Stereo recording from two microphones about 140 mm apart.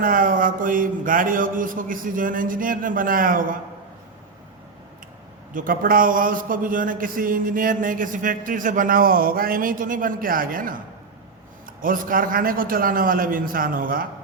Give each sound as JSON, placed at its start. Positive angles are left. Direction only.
{"t": 0.0, "sound": "speech", "side_deg": -80}
{"t": 5.5, "sound": "a man's voice", "side_deg": -85}
{"t": 11.8, "sound": "a man's voice", "side_deg": -80}